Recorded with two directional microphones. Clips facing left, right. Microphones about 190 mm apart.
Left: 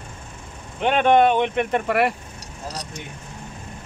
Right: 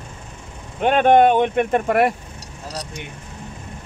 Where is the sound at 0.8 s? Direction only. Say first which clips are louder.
Right 3 dB; 45° right (ahead or behind).